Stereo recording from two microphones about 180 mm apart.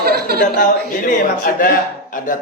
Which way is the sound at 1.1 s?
50° left (ahead or behind).